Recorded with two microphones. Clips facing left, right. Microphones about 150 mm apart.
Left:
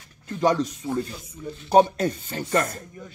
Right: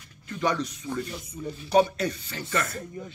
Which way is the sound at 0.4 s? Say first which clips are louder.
Left 6 dB; 40° left (ahead or behind).